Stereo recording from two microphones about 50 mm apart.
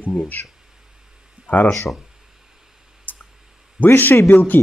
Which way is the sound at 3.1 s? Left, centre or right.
Left.